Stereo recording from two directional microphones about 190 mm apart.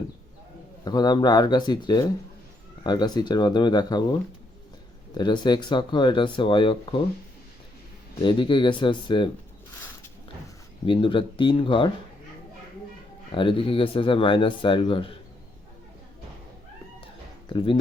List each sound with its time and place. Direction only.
0.9 s speech: 20° left (ahead or behind)
5.1 s speech: 25° left (ahead or behind)
8.2 s speech: 25° left (ahead or behind)
10.8 s speech: 25° left (ahead or behind)
13.3 s speech: 25° left (ahead or behind)
17.5 s speech: 25° left (ahead or behind)